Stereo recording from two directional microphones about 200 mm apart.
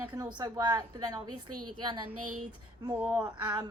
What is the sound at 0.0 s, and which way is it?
A woman's voice, 10° right (ahead or behind).